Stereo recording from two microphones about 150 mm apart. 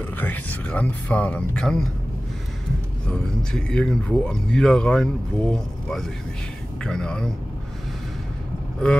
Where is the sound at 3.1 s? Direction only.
5° left (ahead or behind).